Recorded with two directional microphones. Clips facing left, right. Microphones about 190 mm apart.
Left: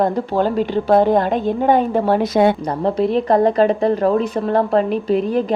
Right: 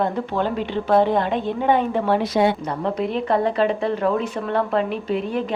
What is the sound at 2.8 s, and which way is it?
Speech, 35° left (ahead or behind).